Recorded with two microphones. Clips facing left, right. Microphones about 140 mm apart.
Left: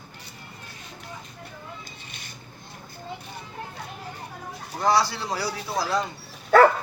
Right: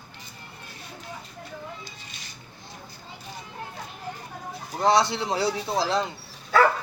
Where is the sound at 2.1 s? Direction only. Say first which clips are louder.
Left 1 dB; 55° left (ahead or behind).